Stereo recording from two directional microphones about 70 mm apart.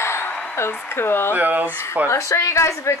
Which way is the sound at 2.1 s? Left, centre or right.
Left.